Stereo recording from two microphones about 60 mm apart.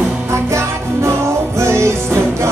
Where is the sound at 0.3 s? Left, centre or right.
Right.